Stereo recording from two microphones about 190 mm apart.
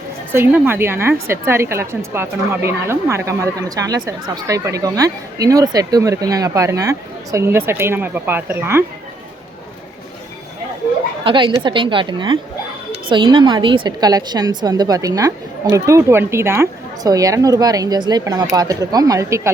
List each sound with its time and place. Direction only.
0.3 s a woman's voice: 10° right (ahead or behind)
11.2 s a woman's voice: 25° right (ahead or behind)